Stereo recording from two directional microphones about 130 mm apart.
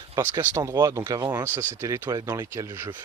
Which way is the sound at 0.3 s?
25° right (ahead or behind).